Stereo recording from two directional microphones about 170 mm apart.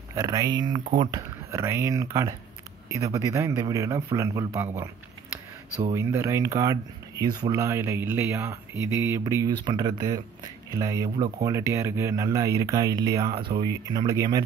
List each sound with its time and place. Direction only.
0.1 s speech: 20° right (ahead or behind)
5.9 s speech: 15° right (ahead or behind)